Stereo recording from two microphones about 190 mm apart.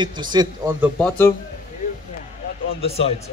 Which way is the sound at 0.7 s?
10° right (ahead or behind).